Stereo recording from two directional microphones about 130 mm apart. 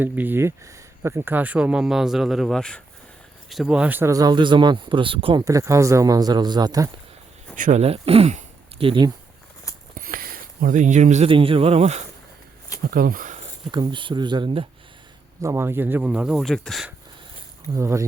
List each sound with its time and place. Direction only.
0.0 s speech: 15° right (ahead or behind)
4.1 s speech: 30° right (ahead or behind)
5.5 s speech: 25° right (ahead or behind)
7.5 s speech: 75° right (ahead or behind); by 8.9 s 55° right (ahead or behind)
9.9 s a sound: 90° right; by 11.3 s 65° right (ahead or behind)
11.3 s speech: 45° right (ahead or behind)
12.9 s speech: 90° right
13.7 s speech: 35° right (ahead or behind)
15.4 s speech: 20° right (ahead or behind); by 16.9 s centre (ahead or behind)
17.7 s speech: 25° right (ahead or behind)